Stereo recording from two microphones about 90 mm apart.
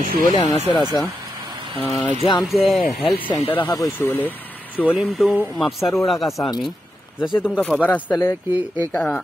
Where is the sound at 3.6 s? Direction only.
45° left (ahead or behind).